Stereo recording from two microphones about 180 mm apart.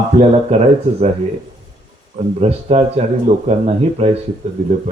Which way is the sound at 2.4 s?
35° right (ahead or behind).